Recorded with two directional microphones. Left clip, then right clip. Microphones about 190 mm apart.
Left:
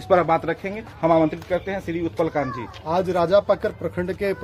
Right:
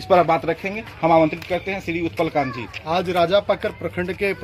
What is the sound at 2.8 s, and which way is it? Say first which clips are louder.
A man's voice: right 1 dB; 10° left (ahead or behind).